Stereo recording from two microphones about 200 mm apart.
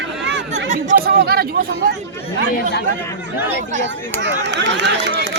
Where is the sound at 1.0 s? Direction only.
50° right (ahead or behind).